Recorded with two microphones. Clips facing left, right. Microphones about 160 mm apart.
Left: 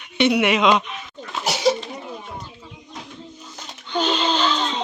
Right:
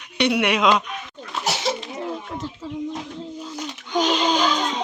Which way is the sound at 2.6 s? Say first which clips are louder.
Right 12 dB; 90° right.